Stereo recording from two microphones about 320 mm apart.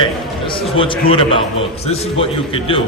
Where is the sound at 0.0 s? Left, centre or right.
Centre.